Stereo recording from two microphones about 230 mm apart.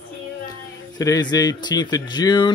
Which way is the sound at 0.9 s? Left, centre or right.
Centre.